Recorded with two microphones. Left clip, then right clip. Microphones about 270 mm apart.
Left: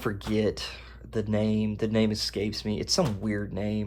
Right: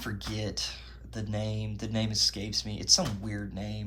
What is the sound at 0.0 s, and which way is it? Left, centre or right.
Speech, left.